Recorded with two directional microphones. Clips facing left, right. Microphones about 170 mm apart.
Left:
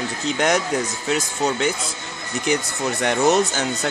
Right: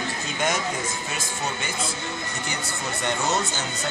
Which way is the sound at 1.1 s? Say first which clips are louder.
Left 9 dB; 75° left (ahead or behind).